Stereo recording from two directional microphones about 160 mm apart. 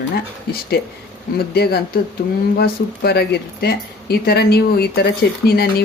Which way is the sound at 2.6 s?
90° left.